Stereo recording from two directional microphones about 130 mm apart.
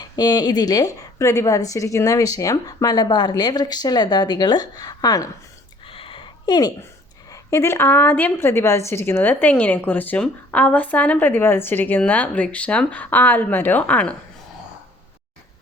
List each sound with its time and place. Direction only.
0.0 s a woman's voice: 30° left (ahead or behind)
5.8 s a sound: 45° left (ahead or behind)
7.3 s a woman's voice: 25° left (ahead or behind)